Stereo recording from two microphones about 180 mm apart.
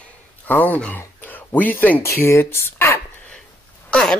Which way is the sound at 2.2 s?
15° left (ahead or behind).